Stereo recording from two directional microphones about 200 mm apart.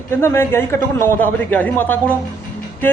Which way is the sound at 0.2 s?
10° left (ahead or behind).